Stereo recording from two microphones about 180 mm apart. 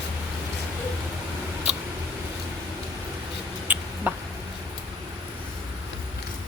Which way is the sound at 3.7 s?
10° right (ahead or behind).